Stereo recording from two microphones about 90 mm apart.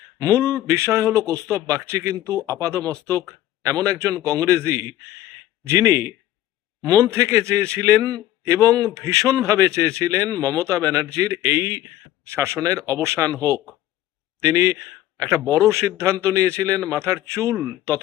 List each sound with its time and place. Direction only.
0.2 s a man's voice: 35° right (ahead or behind)